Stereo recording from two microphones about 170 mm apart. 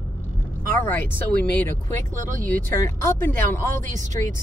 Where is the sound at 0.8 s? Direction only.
10° left (ahead or behind).